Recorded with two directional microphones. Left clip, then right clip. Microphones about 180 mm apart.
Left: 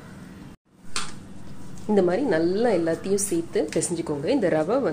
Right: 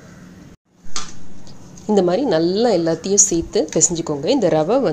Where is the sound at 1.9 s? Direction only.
30° right (ahead or behind).